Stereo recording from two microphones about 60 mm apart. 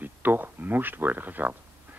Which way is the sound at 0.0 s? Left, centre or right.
Right.